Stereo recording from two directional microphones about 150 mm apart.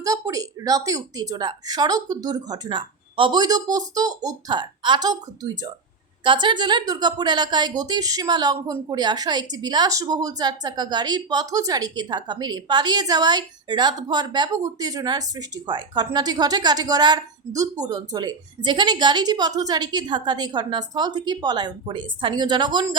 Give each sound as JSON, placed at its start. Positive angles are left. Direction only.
{"t": 0.0, "sound": "speech", "side_deg": -25}